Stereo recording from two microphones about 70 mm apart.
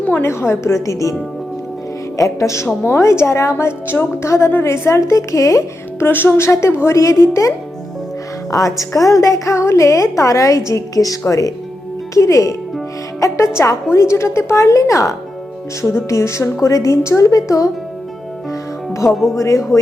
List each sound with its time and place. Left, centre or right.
0.0 s a woman's voice: left
0.3 s a woman's voice: left
2.1 s a woman's voice: left
6.1 s a woman's voice: left
19.4 s a woman's voice: left